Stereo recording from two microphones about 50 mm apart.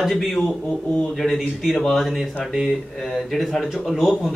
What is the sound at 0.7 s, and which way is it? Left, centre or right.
Speech, left.